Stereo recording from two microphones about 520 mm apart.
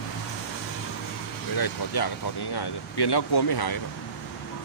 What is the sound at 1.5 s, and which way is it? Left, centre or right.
Speech, left.